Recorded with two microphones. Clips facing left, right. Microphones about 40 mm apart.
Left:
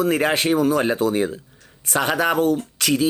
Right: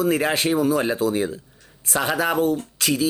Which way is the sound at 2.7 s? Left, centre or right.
Left.